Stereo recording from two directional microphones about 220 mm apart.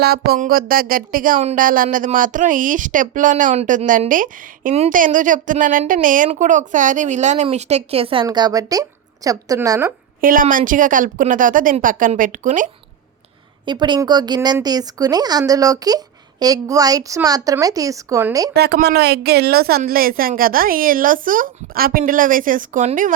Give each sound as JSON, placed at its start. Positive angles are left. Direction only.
{"t": 0.0, "sound": "speech", "side_deg": -45}
{"t": 10.2, "sound": "speech", "side_deg": -40}
{"t": 13.7, "sound": "a woman's voice", "side_deg": -20}
{"t": 18.5, "sound": "a woman's voice", "side_deg": -50}